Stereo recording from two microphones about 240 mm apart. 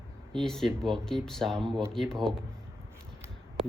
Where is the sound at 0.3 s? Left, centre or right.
Centre.